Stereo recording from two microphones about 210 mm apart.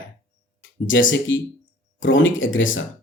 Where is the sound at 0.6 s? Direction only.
65° left (ahead or behind).